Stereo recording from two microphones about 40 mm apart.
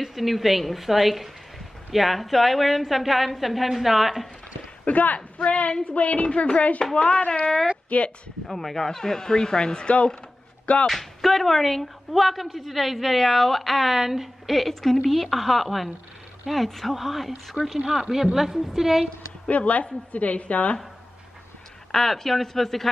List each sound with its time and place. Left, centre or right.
0.0 s speech: centre
4.8 s a woman's voice: left
6.8 s a woman's voice: left
8.5 s speech: centre; by 10.1 s left
10.9 s speech: centre
17.8 s a woman's voice: centre
19.4 s a woman's voice: left
21.9 s speech: centre